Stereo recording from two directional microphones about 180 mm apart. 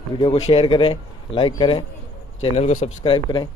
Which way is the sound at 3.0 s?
25° left (ahead or behind).